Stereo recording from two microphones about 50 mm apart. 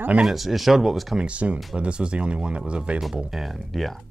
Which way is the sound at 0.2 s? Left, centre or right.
Centre.